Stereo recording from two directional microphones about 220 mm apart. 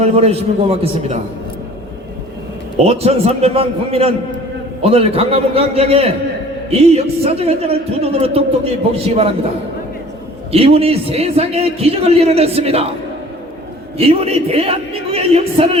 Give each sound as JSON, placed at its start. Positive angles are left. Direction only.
{"t": 0.0, "sound": "a man's voice", "side_deg": -30}
{"t": 2.7, "sound": "a man's voice", "side_deg": -30}
{"t": 10.5, "sound": "a man's voice", "side_deg": -25}
{"t": 14.0, "sound": "a man's voice", "side_deg": -25}